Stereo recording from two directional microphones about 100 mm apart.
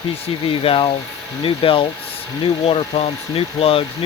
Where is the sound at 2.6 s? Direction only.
75° left (ahead or behind).